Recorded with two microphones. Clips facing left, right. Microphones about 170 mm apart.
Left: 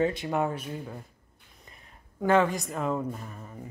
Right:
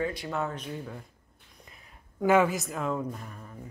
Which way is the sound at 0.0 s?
25° left (ahead or behind).